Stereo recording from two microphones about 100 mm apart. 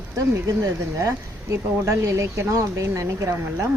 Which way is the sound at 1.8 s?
30° right (ahead or behind).